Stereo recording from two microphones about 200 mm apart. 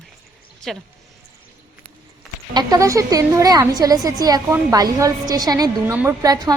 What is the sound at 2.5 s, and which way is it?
A woman's voice, 15° right (ahead or behind).